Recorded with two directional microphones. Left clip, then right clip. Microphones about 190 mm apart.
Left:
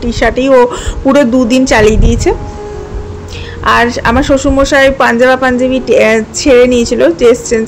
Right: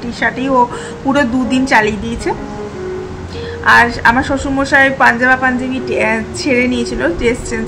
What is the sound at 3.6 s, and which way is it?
A woman's voice, 35° left (ahead or behind).